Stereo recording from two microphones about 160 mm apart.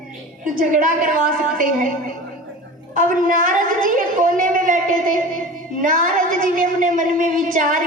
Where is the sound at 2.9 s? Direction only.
55° right (ahead or behind).